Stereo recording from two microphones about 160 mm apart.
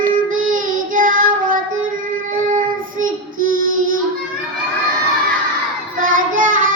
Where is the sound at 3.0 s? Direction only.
60° right (ahead or behind).